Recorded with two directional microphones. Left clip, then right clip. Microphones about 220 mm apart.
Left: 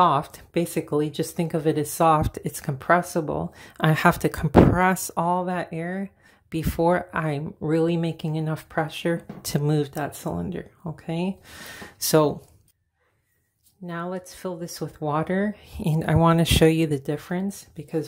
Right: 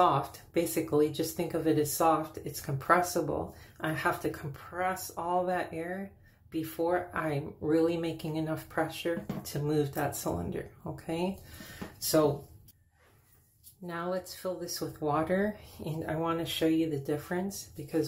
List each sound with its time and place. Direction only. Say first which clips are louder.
0.0 s speech: left 7 dB; 40° left (ahead or behind)
3.7 s speech: left 11 dB; 45° left (ahead or behind)
9.8 s speech: left 3 dB; 30° left (ahead or behind)
13.8 s speech: left 3 dB; 25° left (ahead or behind)
15.8 s speech: left 12 dB; 45° left (ahead or behind)
17.0 s speech: left 4 dB; 30° left (ahead or behind)